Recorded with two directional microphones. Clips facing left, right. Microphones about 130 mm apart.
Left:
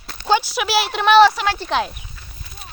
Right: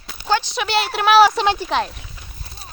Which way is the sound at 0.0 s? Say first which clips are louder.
Left 1 dB; centre (ahead or behind).